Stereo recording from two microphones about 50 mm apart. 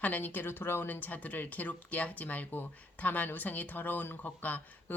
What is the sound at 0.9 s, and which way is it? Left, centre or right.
Speech, left.